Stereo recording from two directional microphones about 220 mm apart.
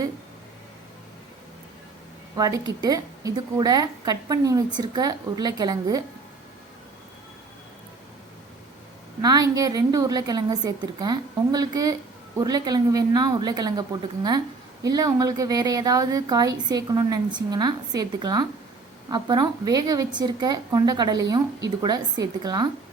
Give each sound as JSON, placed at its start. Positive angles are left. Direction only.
{"t": 2.3, "sound": "a woman's voice", "side_deg": -15}
{"t": 9.2, "sound": "a woman's voice", "side_deg": -15}